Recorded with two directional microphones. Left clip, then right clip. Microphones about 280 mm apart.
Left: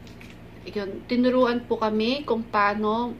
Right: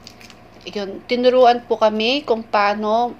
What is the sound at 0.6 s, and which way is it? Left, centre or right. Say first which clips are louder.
A woman's voice: right 4 dB; right.